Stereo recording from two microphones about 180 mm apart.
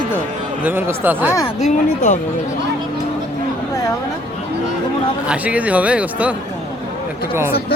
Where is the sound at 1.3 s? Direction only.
20° left (ahead or behind).